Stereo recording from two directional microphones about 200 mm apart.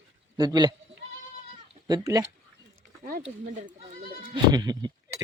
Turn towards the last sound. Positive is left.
turn(degrees=-20)  # may be behind; listen again after turning